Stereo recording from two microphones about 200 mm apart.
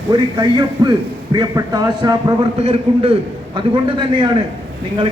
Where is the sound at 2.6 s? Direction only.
30° right (ahead or behind).